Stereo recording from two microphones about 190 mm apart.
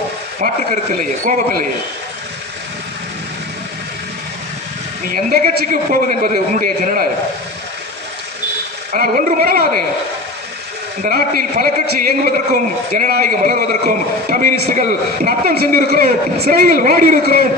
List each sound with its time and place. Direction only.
0.3 s a man's voice: 45° right (ahead or behind)
5.0 s a man's voice: 45° right (ahead or behind)
8.9 s a man's voice: 45° right (ahead or behind)
11.0 s a man's voice: 50° right (ahead or behind)